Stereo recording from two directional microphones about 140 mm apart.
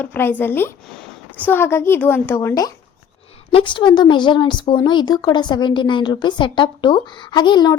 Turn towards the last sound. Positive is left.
turn(degrees=30)  # may be behind; listen again after turning